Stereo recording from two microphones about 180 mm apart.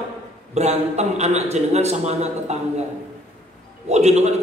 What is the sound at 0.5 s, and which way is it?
A man's voice, 40° right (ahead or behind).